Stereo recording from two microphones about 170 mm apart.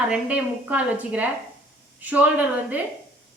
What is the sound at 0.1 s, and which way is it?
A woman's voice, 10° right (ahead or behind).